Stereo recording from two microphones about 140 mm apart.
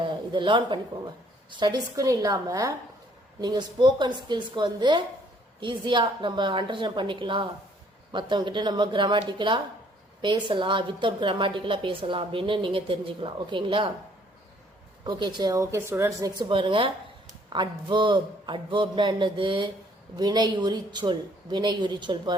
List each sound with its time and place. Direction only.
0.0 s a woman's voice: 35° right (ahead or behind)
15.0 s a woman's voice: 30° right (ahead or behind)